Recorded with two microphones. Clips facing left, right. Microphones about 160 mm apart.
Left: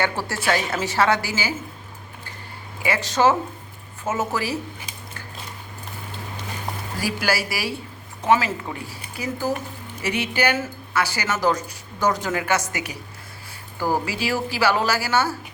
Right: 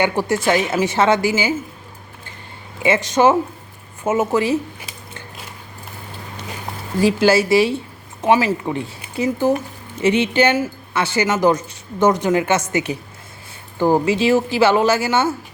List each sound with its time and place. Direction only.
0.0 s speech: 15° right (ahead or behind)
2.8 s speech: 20° right (ahead or behind)
7.0 s speech: 25° right (ahead or behind)